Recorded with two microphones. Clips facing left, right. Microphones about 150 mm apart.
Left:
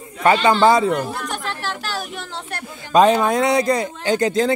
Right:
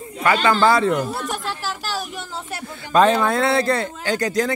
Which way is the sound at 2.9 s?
15° left (ahead or behind).